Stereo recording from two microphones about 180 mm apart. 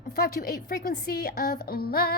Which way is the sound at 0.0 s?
55° left (ahead or behind).